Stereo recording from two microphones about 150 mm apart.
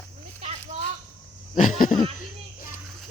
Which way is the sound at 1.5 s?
60° left (ahead or behind).